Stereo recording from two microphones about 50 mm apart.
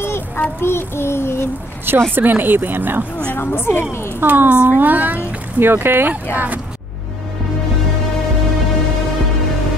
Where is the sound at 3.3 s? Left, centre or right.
Left.